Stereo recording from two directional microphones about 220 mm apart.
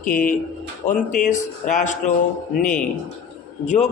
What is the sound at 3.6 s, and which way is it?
Speech, 30° left (ahead or behind).